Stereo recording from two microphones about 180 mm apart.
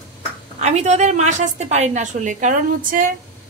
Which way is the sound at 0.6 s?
40° right (ahead or behind).